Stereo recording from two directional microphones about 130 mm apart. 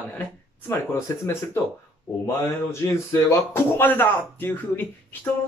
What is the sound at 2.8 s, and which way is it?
Speech, 25° left (ahead or behind).